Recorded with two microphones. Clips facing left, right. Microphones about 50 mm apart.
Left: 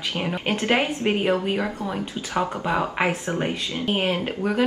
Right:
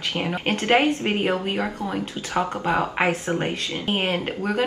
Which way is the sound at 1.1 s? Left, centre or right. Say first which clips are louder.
Left 1 dB; centre.